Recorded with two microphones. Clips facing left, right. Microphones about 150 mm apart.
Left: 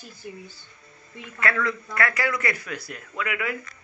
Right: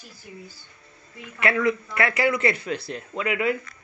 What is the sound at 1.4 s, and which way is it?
A man's voice, 20° right (ahead or behind).